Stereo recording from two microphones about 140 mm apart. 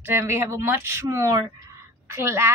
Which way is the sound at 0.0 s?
15° right (ahead or behind).